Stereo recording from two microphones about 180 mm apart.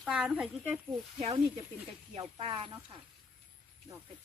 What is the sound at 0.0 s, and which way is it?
Speech, 5° right (ahead or behind).